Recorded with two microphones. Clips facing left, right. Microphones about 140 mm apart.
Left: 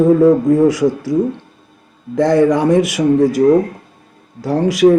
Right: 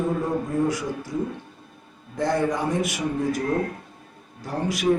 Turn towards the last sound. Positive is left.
turn(degrees=90)